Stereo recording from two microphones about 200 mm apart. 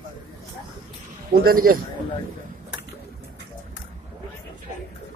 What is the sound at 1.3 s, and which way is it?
Speech, 45° right (ahead or behind).